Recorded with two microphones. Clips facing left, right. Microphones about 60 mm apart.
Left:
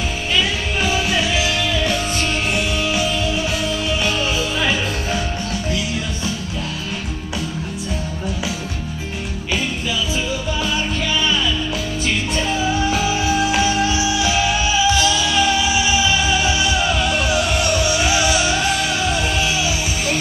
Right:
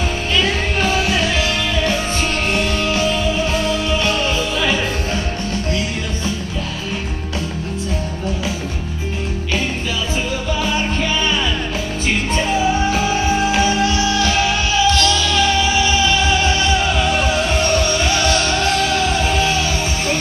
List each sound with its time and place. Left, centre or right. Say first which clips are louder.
0.4 s music: right 3 dB; centre
0.9 s music: right 2 dB; centre
2.5 s music: right 2 dB; centre
10.6 s music: right 4 dB; right
12.9 s music: right 1 dB; right
13.7 s music: right 2 dB; centre